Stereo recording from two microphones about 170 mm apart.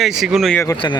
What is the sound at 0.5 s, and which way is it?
Speech, 15° left (ahead or behind).